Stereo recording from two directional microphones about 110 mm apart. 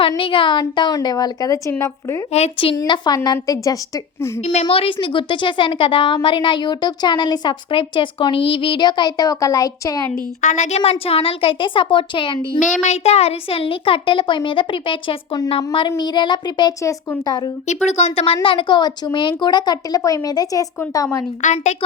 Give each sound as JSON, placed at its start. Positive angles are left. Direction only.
{"t": 0.2, "sound": "speech", "side_deg": 50}
{"t": 0.6, "sound": "a woman's voice", "side_deg": 35}
{"t": 2.3, "sound": "speech", "side_deg": 65}
{"t": 2.8, "sound": "a woman's voice", "side_deg": 40}
{"t": 4.4, "sound": "a woman's voice", "side_deg": 80}
{"t": 4.6, "sound": "a woman's voice", "side_deg": 55}
{"t": 10.4, "sound": "speech", "side_deg": 90}
{"t": 12.8, "sound": "speech", "side_deg": 80}
{"t": 16.0, "sound": "a woman's voice", "side_deg": 40}
{"t": 17.8, "sound": "speech", "side_deg": 85}
{"t": 18.4, "sound": "a woman's voice", "side_deg": 45}
{"t": 21.5, "sound": "a woman's voice", "side_deg": 90}